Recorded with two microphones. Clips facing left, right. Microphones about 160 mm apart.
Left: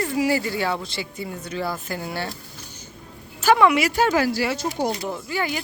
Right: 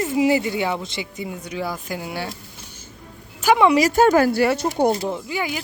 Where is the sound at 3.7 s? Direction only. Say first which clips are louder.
Right 5 dB; 45° right (ahead or behind).